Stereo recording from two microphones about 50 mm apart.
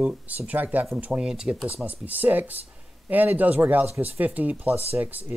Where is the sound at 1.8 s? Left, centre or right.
Right.